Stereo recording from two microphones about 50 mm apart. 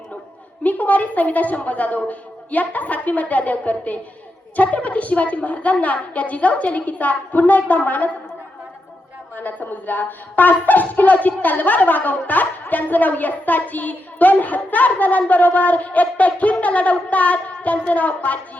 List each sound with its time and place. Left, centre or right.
0.6 s speech: left
9.3 s speech: left